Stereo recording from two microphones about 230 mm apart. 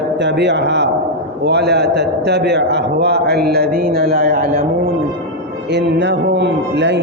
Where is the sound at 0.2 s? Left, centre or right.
Right.